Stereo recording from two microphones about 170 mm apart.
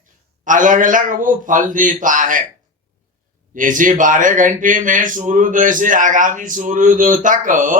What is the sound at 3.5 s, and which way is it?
A man's voice, 50° right (ahead or behind).